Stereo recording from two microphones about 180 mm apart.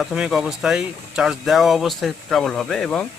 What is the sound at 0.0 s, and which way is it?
Speech, centre (ahead or behind).